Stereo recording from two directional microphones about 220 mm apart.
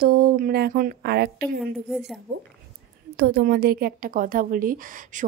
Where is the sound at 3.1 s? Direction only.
50° right (ahead or behind).